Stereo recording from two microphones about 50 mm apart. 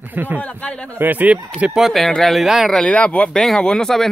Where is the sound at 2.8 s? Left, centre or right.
Left.